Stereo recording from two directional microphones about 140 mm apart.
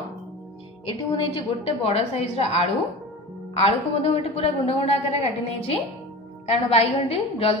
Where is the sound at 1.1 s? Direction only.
40° left (ahead or behind).